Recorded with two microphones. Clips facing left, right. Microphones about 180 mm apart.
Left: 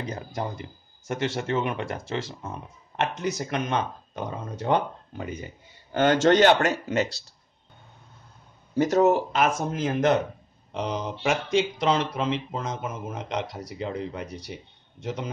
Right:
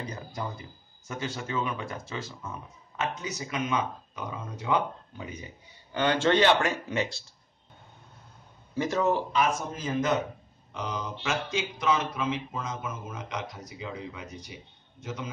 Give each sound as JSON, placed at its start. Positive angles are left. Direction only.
{"t": 0.1, "sound": "speech", "side_deg": 50}
{"t": 1.2, "sound": "speech", "side_deg": 90}
{"t": 1.7, "sound": "speech", "side_deg": 80}
{"t": 8.7, "sound": "speech", "side_deg": 40}
{"t": 9.5, "sound": "speech", "side_deg": 55}